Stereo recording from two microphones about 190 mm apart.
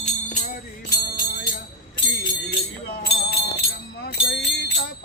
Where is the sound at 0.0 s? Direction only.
40° left (ahead or behind).